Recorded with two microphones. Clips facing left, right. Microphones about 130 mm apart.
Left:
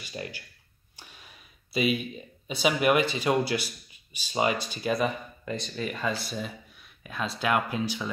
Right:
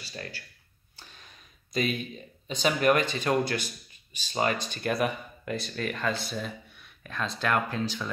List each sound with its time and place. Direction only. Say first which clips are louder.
0.0 s speech: left 3 dB; 15° left (ahead or behind)
1.7 s speech: left 3 dB; 10° left (ahead or behind)